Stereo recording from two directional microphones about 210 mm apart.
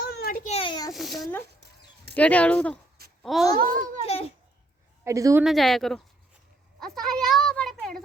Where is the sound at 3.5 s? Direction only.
40° right (ahead or behind).